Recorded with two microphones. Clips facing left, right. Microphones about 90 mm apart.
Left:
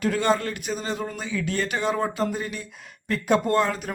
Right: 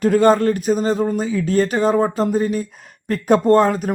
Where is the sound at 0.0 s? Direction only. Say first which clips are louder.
Right 9 dB; 40° right (ahead or behind).